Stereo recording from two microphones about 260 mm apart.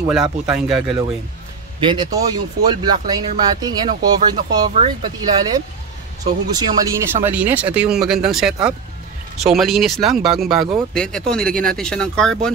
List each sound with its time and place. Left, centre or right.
0.0 s speech: centre
1.9 s speech: centre
6.5 s speech: centre